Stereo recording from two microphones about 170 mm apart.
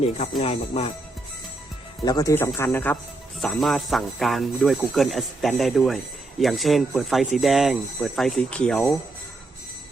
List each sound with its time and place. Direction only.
0.3 s speech: 35° left (ahead or behind)
2.0 s speech: 20° left (ahead or behind)
3.4 s speech: centre (ahead or behind)